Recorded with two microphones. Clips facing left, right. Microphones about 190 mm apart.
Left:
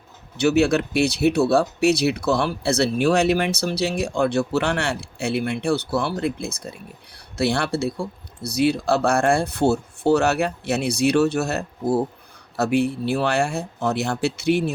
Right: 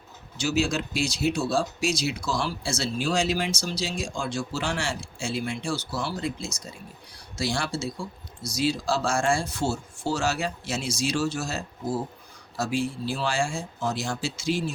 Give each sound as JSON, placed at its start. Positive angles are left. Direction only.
{"t": 0.3, "sound": "speech", "side_deg": 60}